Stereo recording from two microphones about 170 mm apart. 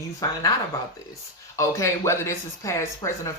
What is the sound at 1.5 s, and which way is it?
Speech, 15° left (ahead or behind).